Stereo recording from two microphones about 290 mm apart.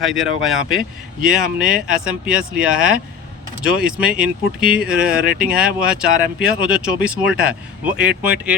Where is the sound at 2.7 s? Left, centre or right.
Right.